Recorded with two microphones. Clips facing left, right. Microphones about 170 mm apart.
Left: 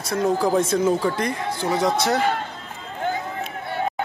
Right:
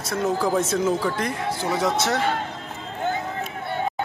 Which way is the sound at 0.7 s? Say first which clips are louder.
Left 2 dB; 5° left (ahead or behind).